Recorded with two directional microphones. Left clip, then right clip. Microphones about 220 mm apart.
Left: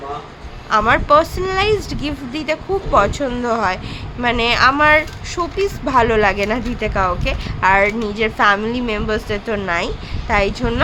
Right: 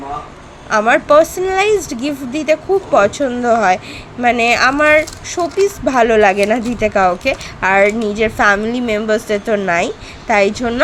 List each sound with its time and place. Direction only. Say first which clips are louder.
0.7 s a woman's voice: right 2 dB; 15° right (ahead or behind)